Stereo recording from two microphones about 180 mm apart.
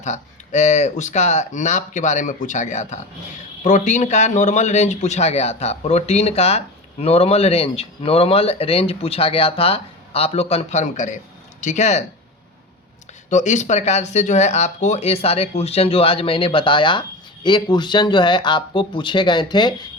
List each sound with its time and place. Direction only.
0.0 s a man's voice: 40° left (ahead or behind)
13.3 s a man's voice: 40° left (ahead or behind); by 19.7 s 25° left (ahead or behind)